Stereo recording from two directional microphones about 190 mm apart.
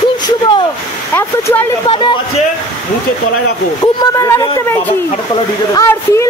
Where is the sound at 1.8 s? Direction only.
25° left (ahead or behind).